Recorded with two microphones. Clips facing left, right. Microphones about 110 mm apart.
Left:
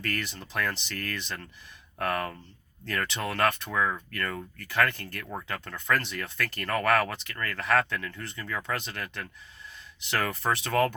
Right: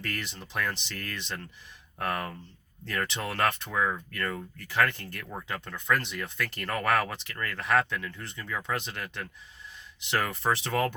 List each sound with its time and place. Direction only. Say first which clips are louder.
0.0 s speech: left 3 dB; 20° right (ahead or behind)